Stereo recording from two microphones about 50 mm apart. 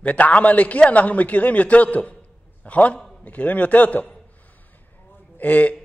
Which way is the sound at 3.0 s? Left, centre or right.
Centre.